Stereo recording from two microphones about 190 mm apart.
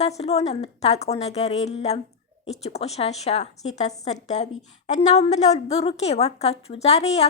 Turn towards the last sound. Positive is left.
turn(degrees=35)  # may be behind; listen again after turning